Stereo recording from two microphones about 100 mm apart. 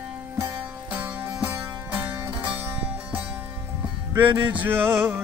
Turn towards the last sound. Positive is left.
turn(degrees=-20)  # may be behind; listen again after turning